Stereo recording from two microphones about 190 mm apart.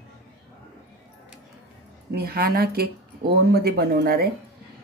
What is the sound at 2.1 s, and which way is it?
Speech, 55° right (ahead or behind).